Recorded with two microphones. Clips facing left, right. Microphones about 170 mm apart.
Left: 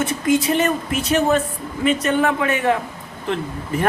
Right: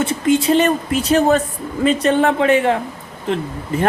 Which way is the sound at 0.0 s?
30° right (ahead or behind).